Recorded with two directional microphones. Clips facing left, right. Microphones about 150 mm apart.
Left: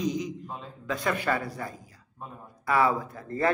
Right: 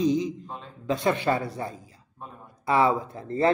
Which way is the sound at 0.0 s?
25° right (ahead or behind).